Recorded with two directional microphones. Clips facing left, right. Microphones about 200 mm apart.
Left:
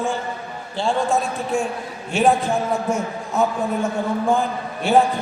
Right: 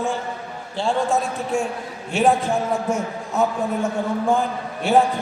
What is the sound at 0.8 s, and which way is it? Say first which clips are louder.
A man's voice: even; 5° right (ahead or behind).